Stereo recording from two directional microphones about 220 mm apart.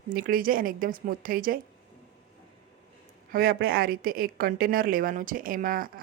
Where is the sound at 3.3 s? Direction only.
40° right (ahead or behind).